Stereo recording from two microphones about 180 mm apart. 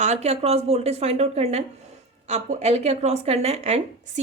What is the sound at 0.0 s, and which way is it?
A woman's voice, 40° right (ahead or behind).